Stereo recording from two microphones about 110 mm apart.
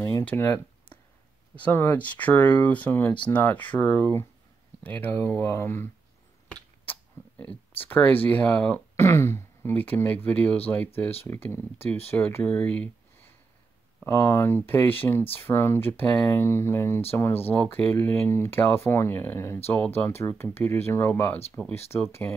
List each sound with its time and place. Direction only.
0.3 s speech: 20° left (ahead or behind)
6.9 s speech: 15° left (ahead or behind)
8.9 s speech: 25° left (ahead or behind)
12.5 s a sound: 10° left (ahead or behind)
14.0 s speech: 25° left (ahead or behind)